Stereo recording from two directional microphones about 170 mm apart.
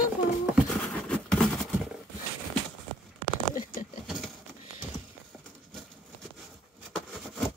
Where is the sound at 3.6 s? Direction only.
50° left (ahead or behind).